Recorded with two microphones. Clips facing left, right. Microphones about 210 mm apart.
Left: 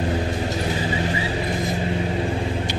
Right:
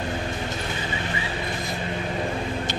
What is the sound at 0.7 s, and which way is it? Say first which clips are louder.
Vehicle: left 6 dB; 35° left (ahead or behind).